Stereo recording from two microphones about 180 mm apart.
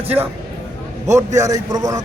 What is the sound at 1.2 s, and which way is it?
Speech, 20° right (ahead or behind).